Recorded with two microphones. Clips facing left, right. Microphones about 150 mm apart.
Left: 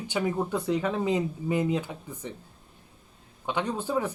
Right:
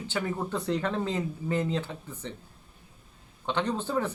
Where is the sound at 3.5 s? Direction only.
10° left (ahead or behind).